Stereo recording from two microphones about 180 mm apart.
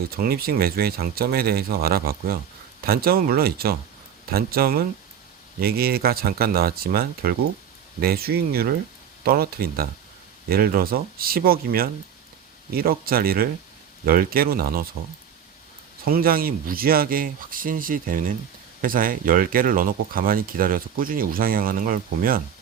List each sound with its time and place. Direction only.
0.1 s speech: 55° right (ahead or behind)
16.0 s speech: 55° right (ahead or behind)